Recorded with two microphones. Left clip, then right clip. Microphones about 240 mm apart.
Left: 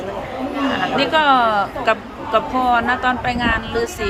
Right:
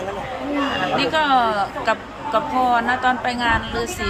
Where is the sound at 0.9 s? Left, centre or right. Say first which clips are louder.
Left 3 dB; centre.